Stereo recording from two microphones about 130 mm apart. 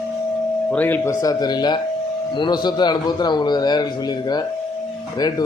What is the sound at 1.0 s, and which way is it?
Speech, 30° left (ahead or behind).